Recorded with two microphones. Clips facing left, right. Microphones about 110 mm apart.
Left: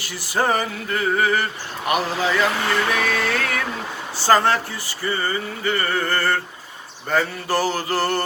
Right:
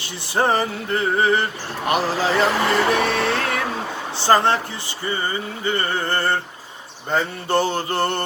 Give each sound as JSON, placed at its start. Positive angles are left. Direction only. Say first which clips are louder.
{"t": 0.0, "sound": "male singing", "louder": "right 1 dB", "side_deg": -25}
{"t": 1.9, "sound": "speech", "louder": "right 1 dB", "side_deg": -35}
{"t": 2.9, "sound": "male singing", "louder": "right 2 dB", "side_deg": -30}